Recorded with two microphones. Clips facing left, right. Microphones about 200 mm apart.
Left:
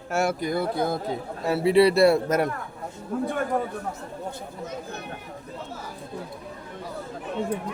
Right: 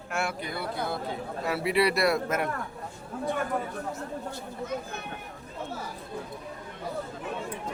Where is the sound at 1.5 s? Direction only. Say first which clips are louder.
Left 7 dB; 30° left (ahead or behind).